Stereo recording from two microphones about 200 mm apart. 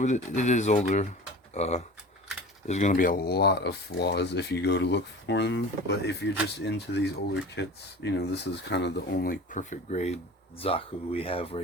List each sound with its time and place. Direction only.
0.0 s speech: 35° left (ahead or behind)